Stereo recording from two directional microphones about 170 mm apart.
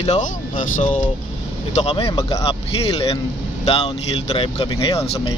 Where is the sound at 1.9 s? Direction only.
30° left (ahead or behind).